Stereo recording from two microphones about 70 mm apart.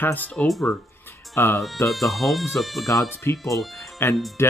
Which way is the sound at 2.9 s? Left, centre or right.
Left.